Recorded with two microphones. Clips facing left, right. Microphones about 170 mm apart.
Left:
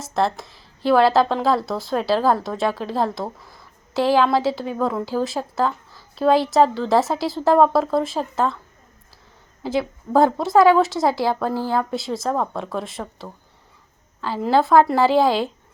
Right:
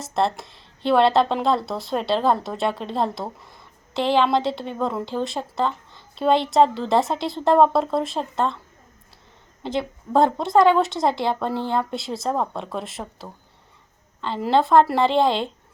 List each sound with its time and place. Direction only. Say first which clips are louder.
0.0 s speech: left 1 dB; centre (ahead or behind)
9.6 s speech: left 3 dB; 5° left (ahead or behind)